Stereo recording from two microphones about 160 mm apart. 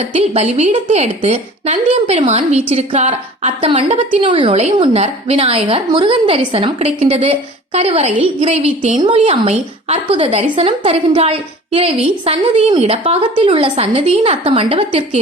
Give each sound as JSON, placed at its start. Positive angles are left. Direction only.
{"t": 0.1, "sound": "a woman's voice", "side_deg": -45}
{"t": 4.2, "sound": "a woman's voice", "side_deg": -30}